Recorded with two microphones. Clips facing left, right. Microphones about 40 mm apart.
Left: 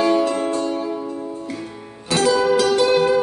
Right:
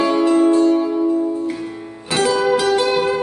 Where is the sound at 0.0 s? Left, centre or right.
Centre.